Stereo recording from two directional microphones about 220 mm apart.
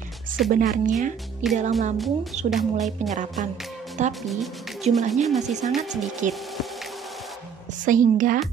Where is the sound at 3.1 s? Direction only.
35° right (ahead or behind).